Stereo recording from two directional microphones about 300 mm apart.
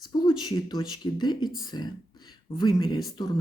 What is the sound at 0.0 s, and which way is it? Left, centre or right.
Speech, centre.